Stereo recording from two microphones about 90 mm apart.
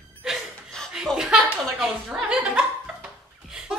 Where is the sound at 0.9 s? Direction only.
5° right (ahead or behind).